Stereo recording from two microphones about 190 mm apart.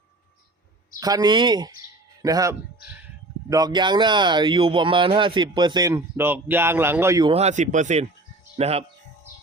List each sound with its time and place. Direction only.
0.9 s speech: 20° right (ahead or behind)
7.3 s speech: 35° right (ahead or behind)